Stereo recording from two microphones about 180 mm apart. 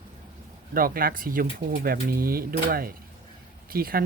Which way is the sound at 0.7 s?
55° right (ahead or behind).